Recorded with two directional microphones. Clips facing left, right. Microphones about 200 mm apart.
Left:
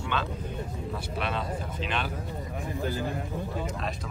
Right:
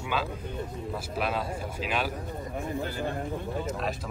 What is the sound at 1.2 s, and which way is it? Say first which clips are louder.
Speech: right 2 dB; 5° right (ahead or behind).